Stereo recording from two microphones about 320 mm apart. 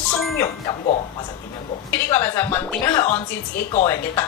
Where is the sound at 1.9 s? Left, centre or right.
Centre.